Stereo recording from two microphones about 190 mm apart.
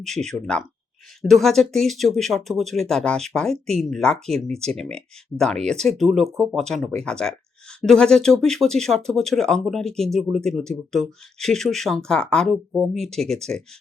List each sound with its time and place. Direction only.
0.0 s speech: 5° left (ahead or behind)
6.2 s speech: 15° right (ahead or behind)
6.6 s speech: centre (ahead or behind)